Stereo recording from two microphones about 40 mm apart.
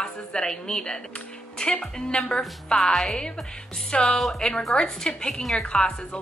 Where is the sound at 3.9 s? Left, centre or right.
Left.